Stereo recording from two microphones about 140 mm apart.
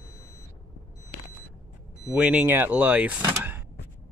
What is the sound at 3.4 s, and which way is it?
Power windows, 15° right (ahead or behind).